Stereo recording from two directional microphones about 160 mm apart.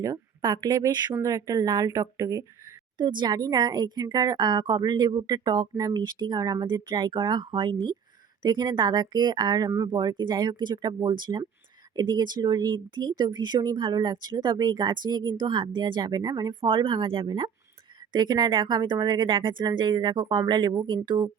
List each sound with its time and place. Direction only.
0.0 s speech: 25° right (ahead or behind)